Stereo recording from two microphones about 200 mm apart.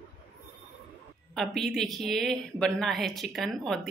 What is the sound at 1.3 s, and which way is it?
A woman's voice, centre (ahead or behind).